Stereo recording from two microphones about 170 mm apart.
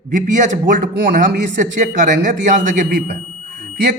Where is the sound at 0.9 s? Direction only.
75° right (ahead or behind).